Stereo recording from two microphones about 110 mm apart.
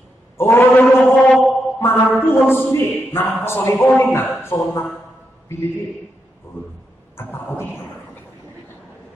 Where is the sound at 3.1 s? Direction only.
20° left (ahead or behind).